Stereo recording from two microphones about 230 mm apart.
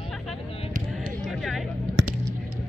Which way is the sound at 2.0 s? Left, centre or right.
Right.